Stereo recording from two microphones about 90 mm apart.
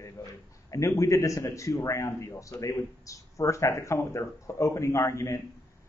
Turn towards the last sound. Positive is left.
turn(degrees=30)  # may be behind; listen again after turning